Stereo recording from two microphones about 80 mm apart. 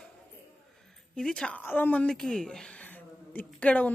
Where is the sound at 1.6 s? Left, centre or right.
Left.